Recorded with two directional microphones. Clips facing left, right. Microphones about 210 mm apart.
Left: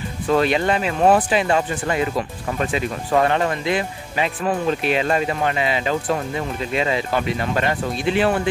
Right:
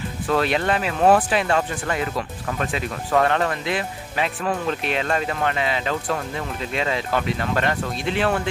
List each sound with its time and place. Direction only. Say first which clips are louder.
0.3 s speech: left 3 dB; centre (ahead or behind)
3.1 s speech: left 1 dB; 5° left (ahead or behind)